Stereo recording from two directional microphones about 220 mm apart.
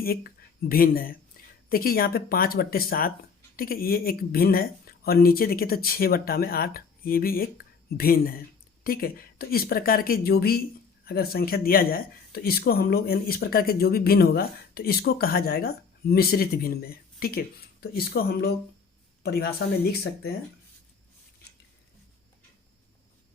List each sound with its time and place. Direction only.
0.0 s speech: 45° left (ahead or behind)